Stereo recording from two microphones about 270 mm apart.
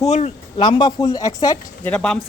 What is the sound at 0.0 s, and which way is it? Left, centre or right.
Speech, left.